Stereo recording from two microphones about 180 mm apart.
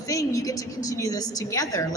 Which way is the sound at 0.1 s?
15° left (ahead or behind).